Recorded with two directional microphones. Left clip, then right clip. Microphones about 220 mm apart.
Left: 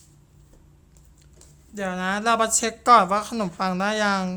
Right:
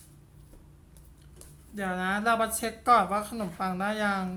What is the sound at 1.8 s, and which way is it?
Speech, 45° left (ahead or behind).